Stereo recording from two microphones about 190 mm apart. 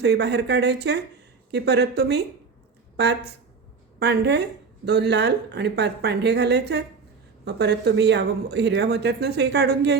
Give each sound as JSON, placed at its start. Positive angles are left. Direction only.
{"t": 0.0, "sound": "speech", "side_deg": -60}